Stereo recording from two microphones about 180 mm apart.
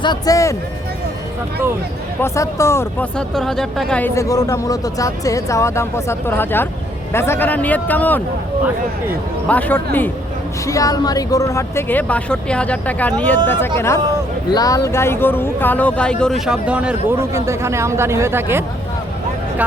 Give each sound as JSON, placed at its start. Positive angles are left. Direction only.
{"t": 0.0, "sound": "speech", "side_deg": 20}
{"t": 2.2, "sound": "speech", "side_deg": 15}
{"t": 3.2, "sound": "speech", "side_deg": 0}
{"t": 9.5, "sound": "speech", "side_deg": 10}